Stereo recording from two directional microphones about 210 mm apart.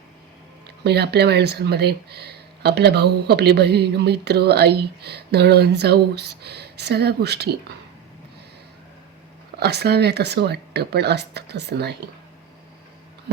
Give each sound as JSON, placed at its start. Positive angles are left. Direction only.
{"t": 0.9, "sound": "speech", "side_deg": -50}
{"t": 9.6, "sound": "speech", "side_deg": -50}